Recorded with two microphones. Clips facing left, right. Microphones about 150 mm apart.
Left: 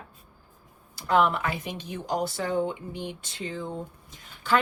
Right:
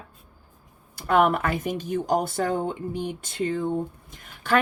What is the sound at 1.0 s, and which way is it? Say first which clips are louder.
Speech: right 3 dB; 55° right (ahead or behind).